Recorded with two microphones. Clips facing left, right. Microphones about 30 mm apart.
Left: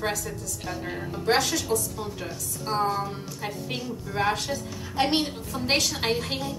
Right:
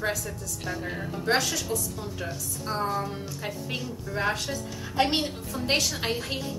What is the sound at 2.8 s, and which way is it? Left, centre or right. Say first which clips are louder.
A woman's voice: left 3 dB; left.